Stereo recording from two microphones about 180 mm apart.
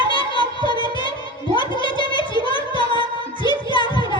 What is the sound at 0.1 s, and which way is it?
Music, 25° left (ahead or behind).